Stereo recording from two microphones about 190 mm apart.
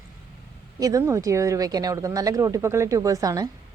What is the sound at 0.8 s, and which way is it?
A woman's voice, 15° right (ahead or behind).